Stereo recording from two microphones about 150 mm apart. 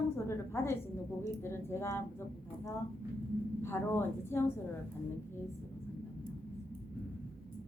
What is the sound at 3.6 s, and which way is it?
Speech, 15° left (ahead or behind).